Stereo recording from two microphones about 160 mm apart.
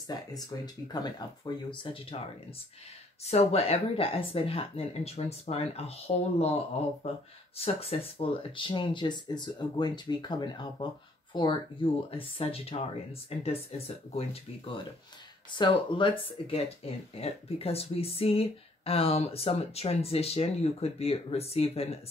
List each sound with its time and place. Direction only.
0.1 s speech: 25° left (ahead or behind)
3.3 s speech: 40° left (ahead or behind)